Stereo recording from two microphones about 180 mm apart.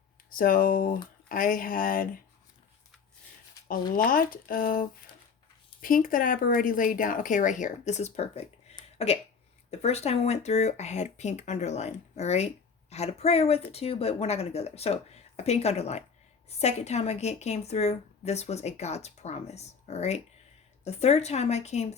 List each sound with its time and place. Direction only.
0.3 s speech: 50° left (ahead or behind)
3.7 s speech: 50° left (ahead or behind)